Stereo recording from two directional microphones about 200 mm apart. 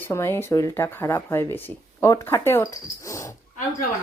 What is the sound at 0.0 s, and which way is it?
Speech, 10° left (ahead or behind).